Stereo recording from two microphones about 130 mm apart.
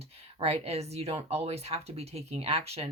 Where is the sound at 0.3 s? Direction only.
50° right (ahead or behind).